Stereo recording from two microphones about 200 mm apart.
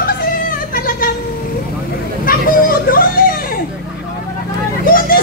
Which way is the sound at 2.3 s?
45° left (ahead or behind).